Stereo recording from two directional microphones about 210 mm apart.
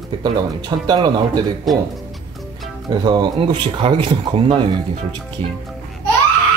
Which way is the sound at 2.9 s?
20° right (ahead or behind).